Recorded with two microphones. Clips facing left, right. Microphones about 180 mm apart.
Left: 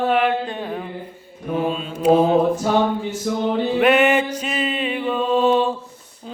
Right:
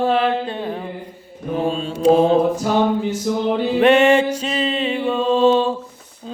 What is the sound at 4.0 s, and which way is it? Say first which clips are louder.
Music: right 3 dB; 30° right (ahead or behind).